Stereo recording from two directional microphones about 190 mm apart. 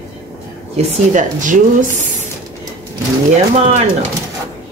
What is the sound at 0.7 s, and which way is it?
Speech, 40° right (ahead or behind).